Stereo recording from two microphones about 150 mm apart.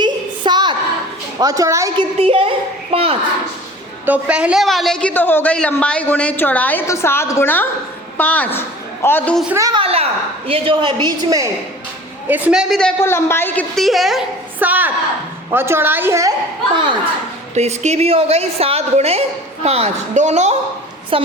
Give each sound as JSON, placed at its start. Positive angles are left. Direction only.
{"t": 0.0, "sound": "a sound", "side_deg": -30}
{"t": 1.4, "sound": "a woman's voice", "side_deg": -25}
{"t": 2.1, "sound": "a child's voice", "side_deg": -40}
{"t": 4.0, "sound": "a man's voice", "side_deg": -10}
{"t": 9.6, "sound": "a woman's voice", "side_deg": -25}
{"t": 9.8, "sound": "a woman's voice", "side_deg": -40}
{"t": 12.3, "sound": "a man's voice", "side_deg": -10}
{"t": 13.0, "sound": "a man's voice", "side_deg": 15}
{"t": 13.8, "sound": "a man's voice", "side_deg": 0}
{"t": 14.6, "sound": "a sound", "side_deg": -10}
{"t": 15.4, "sound": "a woman's voice", "side_deg": -15}
{"t": 17.5, "sound": "a woman's voice", "side_deg": -50}
{"t": 21.1, "sound": "a child's voice", "side_deg": -40}